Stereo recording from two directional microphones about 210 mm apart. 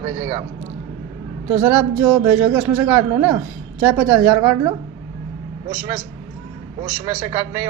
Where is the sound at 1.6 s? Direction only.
5° right (ahead or behind).